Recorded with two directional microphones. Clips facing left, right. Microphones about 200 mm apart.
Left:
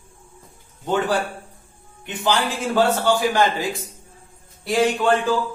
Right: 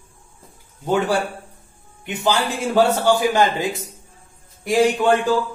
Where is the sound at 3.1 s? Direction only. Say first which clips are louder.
Right 2 dB; 20° right (ahead or behind).